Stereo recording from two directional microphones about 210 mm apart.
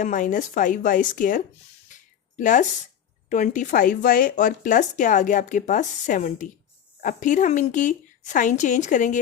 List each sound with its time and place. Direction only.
0.0 s speech: 40° left (ahead or behind)